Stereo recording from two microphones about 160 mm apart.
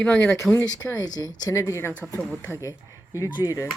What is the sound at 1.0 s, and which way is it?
Speech, 20° left (ahead or behind).